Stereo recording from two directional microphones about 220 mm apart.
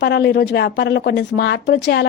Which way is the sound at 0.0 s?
50° left (ahead or behind).